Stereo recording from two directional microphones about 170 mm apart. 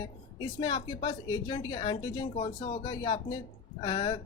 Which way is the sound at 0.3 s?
25° left (ahead or behind).